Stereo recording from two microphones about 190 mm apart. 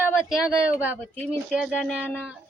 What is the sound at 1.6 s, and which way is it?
Speech, 5° left (ahead or behind).